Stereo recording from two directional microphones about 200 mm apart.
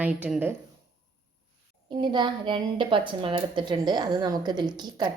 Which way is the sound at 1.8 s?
25° right (ahead or behind).